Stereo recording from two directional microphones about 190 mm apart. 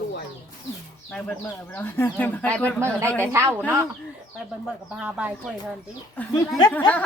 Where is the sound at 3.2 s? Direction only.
15° right (ahead or behind).